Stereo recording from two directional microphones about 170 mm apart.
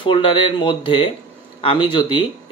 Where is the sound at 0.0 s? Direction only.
30° left (ahead or behind).